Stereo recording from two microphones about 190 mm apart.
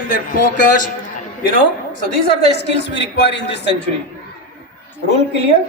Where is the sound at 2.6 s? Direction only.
65° left (ahead or behind).